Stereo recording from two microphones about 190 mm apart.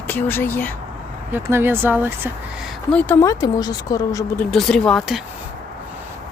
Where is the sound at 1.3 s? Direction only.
10° right (ahead or behind).